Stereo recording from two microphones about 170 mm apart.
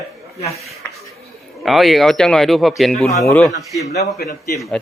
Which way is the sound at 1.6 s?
Centre (ahead or behind).